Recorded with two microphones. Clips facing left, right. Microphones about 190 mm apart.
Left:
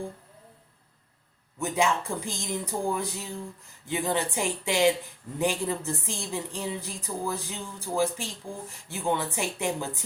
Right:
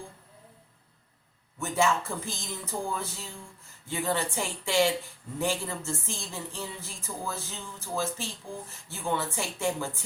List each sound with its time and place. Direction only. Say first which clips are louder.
1.5 s a woman's voice: left 1 dB; 15° left (ahead or behind)